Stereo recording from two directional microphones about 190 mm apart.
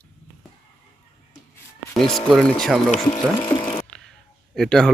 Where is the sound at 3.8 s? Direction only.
5° left (ahead or behind).